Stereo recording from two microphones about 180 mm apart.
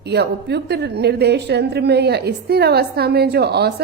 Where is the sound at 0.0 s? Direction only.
65° right (ahead or behind).